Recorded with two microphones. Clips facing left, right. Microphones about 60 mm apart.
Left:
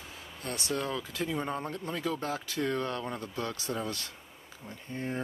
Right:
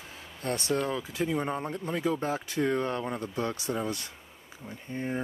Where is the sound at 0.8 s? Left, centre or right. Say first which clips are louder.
Right 3 dB; centre.